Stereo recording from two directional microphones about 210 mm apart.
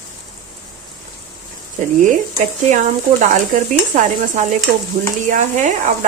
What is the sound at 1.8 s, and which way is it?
A woman's voice, 35° right (ahead or behind).